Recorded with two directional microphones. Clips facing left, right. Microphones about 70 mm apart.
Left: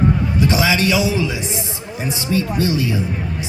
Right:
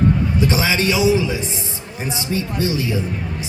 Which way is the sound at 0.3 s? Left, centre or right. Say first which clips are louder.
Left 2 dB; right.